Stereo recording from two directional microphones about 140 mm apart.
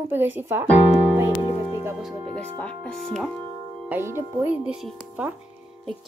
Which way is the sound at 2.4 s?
10° left (ahead or behind).